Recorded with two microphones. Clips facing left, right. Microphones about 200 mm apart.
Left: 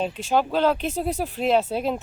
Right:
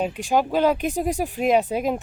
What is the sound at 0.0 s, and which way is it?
Speech, 10° right (ahead or behind).